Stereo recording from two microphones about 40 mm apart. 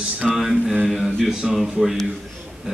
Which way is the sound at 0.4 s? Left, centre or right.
Centre.